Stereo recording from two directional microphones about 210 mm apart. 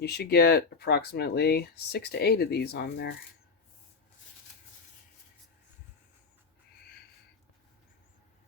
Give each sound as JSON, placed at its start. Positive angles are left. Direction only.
{"t": 0.0, "sound": "speech", "side_deg": 50}